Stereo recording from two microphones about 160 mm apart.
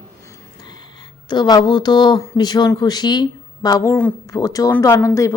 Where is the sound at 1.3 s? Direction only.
25° left (ahead or behind).